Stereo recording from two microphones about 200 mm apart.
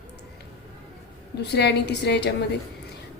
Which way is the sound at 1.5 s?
55° left (ahead or behind).